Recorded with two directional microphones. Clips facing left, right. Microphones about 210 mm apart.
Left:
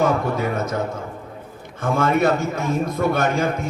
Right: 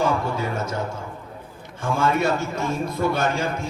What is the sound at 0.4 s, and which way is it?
Speech, 30° right (ahead or behind).